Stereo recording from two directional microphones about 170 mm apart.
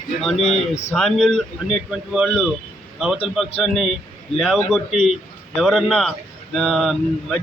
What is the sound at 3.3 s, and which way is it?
Speech, centre (ahead or behind).